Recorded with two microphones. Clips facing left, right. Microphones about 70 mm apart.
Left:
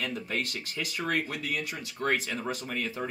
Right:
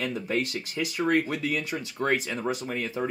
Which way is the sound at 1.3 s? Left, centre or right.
Right.